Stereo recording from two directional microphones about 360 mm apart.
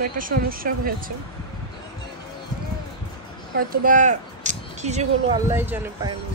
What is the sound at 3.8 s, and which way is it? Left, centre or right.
Speech, right.